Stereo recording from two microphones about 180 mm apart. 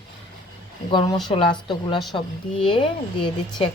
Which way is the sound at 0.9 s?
25° left (ahead or behind).